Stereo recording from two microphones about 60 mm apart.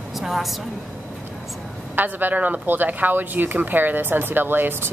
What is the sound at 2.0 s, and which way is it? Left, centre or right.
Speech, right.